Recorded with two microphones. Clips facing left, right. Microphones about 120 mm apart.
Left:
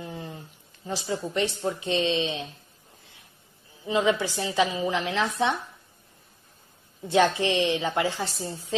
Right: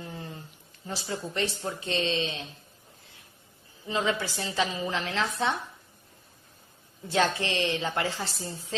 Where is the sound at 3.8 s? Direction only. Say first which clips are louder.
Left 5 dB; 15° left (ahead or behind).